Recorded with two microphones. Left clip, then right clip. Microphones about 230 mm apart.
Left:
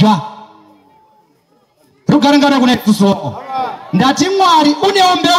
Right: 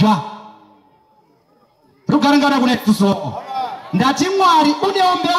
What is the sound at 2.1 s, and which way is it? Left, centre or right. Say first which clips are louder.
A man's voice: left 4 dB; left.